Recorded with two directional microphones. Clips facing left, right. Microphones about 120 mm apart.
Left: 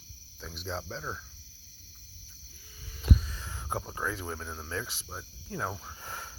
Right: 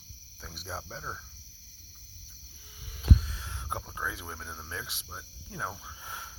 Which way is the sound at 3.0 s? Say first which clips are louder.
Even; centre (ahead or behind).